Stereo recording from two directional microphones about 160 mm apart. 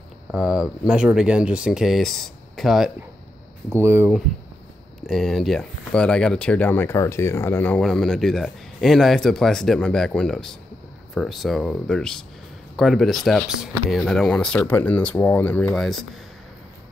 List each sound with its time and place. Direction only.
0.3 s speech: centre (ahead or behind)
3.7 s speech: 15° right (ahead or behind)
5.0 s speech: centre (ahead or behind)